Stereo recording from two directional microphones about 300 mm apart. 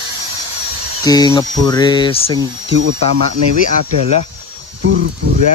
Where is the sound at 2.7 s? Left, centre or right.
Right.